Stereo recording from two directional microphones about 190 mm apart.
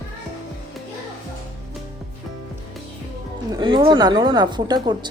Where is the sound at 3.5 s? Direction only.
25° right (ahead or behind).